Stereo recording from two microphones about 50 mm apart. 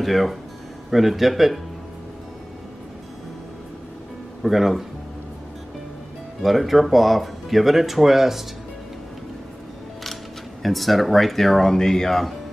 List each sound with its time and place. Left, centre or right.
0.0 s speech: centre
4.4 s speech: centre
6.4 s speech: centre
10.6 s speech: centre